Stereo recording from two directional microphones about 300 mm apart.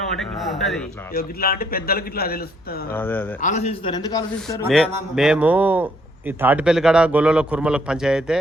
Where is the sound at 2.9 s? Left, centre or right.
Centre.